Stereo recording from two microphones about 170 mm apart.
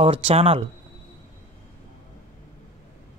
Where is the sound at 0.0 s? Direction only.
35° right (ahead or behind).